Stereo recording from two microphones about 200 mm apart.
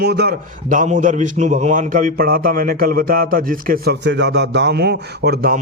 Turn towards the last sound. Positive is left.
turn(degrees=-50)  # may be behind; listen again after turning